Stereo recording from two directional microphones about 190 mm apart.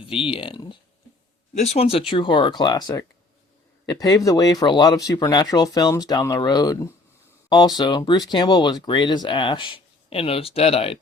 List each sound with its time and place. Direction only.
0.1 s speech: 30° left (ahead or behind)